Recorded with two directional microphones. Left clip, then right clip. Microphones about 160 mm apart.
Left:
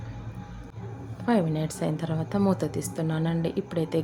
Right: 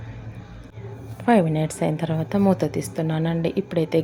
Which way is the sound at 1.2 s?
20° right (ahead or behind).